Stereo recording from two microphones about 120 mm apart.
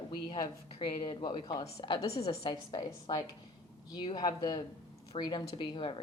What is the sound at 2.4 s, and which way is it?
A woman's voice, 35° left (ahead or behind).